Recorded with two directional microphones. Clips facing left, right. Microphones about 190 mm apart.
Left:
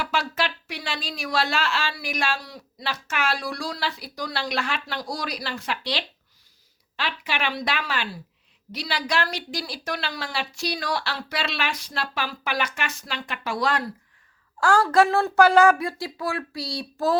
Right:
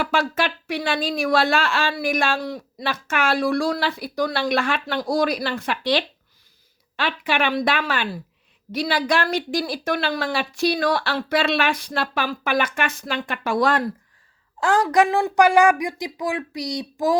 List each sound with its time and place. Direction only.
0.0 s speech: 50° right (ahead or behind)
14.6 s speech: 20° right (ahead or behind)